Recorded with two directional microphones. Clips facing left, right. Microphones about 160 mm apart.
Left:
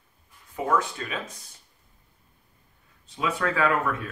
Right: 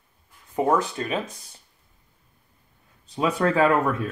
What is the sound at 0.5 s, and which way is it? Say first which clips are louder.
Speech: right 4 dB; 35° right (ahead or behind).